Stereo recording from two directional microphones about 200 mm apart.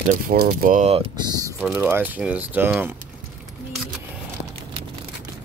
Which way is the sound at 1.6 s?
5° right (ahead or behind).